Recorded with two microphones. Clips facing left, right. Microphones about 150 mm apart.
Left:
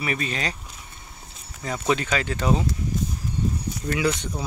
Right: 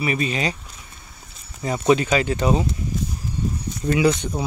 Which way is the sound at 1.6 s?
15° right (ahead or behind).